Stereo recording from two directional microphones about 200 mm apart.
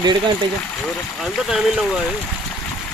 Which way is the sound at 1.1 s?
Centre (ahead or behind).